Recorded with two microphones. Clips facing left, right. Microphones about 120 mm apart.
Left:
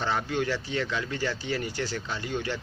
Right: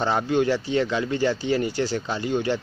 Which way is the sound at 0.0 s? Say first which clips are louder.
Right 7 dB; 25° right (ahead or behind).